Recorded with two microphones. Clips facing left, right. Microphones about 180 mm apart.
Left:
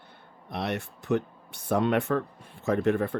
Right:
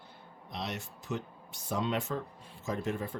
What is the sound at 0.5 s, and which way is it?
Speech, 60° left (ahead or behind).